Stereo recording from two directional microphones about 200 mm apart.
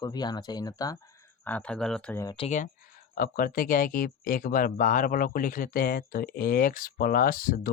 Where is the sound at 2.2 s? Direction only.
20° left (ahead or behind).